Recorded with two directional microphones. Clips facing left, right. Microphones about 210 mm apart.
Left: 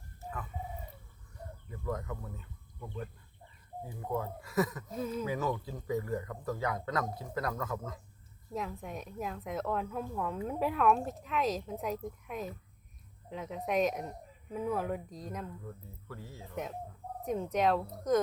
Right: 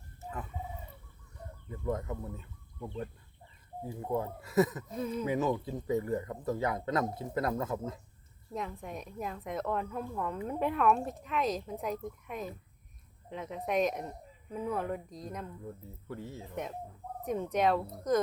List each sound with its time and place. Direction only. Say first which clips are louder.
1.7 s speech: right 3 dB; 25° right (ahead or behind)
4.4 s a man's voice: right 5 dB; 25° right (ahead or behind)
4.9 s a woman's voice: right 1 dB; centre (ahead or behind)
5.2 s a man's voice: right 3 dB; 20° right (ahead or behind)
8.5 s a woman's voice: even; centre (ahead or behind)
15.6 s a man's voice: right 3 dB; 25° right (ahead or behind)
17.2 s a woman's voice: right 1 dB; centre (ahead or behind)